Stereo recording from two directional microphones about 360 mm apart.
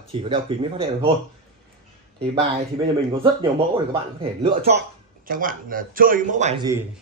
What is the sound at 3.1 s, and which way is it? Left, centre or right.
A man's voice, centre.